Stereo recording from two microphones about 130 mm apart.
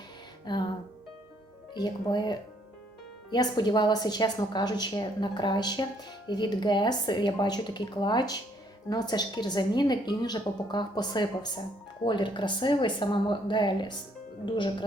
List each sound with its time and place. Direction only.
0.4 s music: 35° left (ahead or behind)
1.7 s a woman's voice: 35° left (ahead or behind)